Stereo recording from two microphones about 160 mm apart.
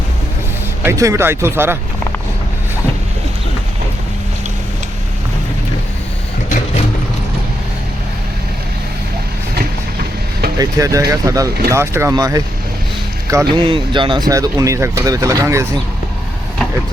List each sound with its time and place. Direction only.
0.9 s speech: 20° right (ahead or behind)
10.6 s speech: 20° right (ahead or behind)